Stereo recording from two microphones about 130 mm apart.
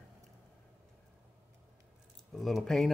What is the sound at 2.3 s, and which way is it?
Speech, centre (ahead or behind).